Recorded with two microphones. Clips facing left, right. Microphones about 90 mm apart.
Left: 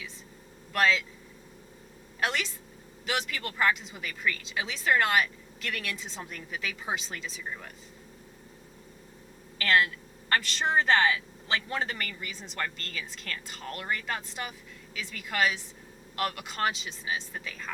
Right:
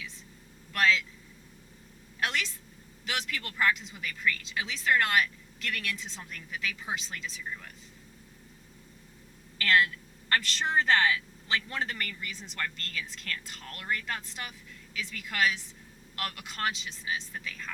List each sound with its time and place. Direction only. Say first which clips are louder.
0.7 s a woman's voice: left 1 dB; 5° left (ahead or behind)
2.2 s a woman's voice: left 2 dB; centre (ahead or behind)
7.4 s speech: left 1 dB; 15° left (ahead or behind)
9.6 s a woman's voice: even; 5° left (ahead or behind)